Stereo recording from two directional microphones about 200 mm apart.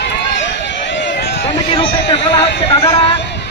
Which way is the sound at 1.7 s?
30° left (ahead or behind).